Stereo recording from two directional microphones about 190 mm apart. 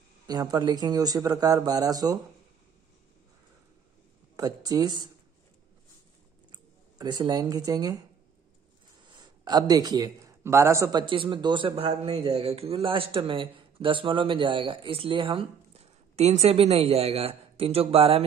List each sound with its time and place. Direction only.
0.3 s a man's voice: 20° right (ahead or behind)
4.4 s a man's voice: 20° right (ahead or behind)
6.5 s speech: 20° right (ahead or behind)
9.2 s a man's voice: 20° right (ahead or behind)